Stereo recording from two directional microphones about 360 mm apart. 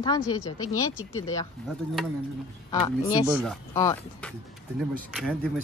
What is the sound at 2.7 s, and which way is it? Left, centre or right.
Speech, centre.